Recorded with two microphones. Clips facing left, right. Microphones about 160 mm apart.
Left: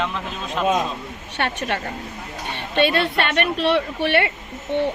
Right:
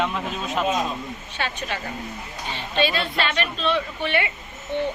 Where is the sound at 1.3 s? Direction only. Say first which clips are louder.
Left 5 dB; 65° left (ahead or behind).